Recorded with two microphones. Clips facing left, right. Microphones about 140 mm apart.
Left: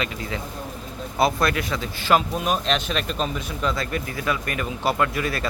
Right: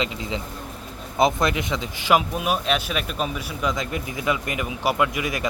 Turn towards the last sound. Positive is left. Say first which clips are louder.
# even
turn(degrees=-15)  # may be behind; listen again after turning